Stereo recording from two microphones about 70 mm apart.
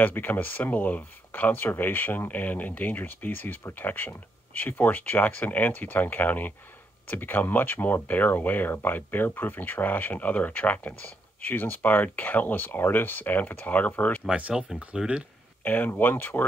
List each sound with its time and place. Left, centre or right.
0.0 s speech: left
14.3 s speech: centre
15.6 s speech: left